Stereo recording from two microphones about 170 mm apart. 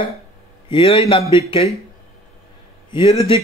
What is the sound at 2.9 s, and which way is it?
Speech, 25° left (ahead or behind).